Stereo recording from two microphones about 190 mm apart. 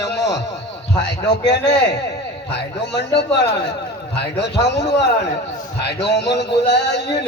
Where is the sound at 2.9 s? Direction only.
65° left (ahead or behind).